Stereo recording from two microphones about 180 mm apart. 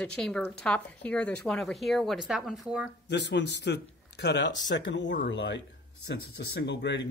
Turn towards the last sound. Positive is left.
turn(degrees=75)  # may be behind; listen again after turning